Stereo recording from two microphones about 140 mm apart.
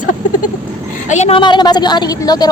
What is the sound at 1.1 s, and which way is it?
Speech, 55° left (ahead or behind).